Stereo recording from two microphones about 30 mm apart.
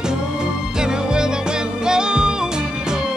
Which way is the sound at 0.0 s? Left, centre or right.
Right.